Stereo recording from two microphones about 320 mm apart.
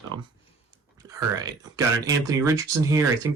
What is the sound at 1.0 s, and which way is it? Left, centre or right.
Speech, centre.